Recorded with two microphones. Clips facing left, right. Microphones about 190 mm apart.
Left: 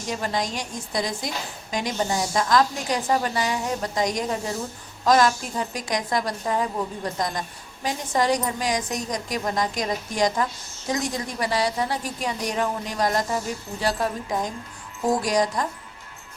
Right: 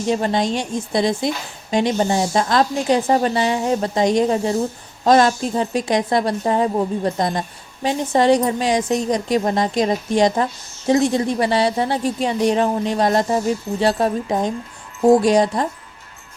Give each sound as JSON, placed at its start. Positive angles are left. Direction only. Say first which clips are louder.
{"t": 0.0, "sound": "a woman's voice", "louder": "right 8 dB", "side_deg": -25}